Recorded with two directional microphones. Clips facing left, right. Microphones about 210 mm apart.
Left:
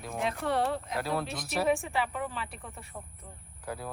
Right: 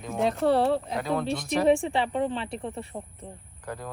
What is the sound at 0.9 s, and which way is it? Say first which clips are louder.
Speech: right 5 dB; 5° left (ahead or behind).